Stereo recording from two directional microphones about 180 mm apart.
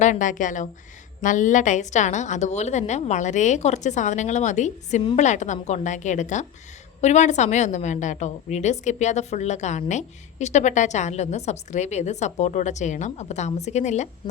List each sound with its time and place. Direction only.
0.0 s a woman's voice: 45° left (ahead or behind)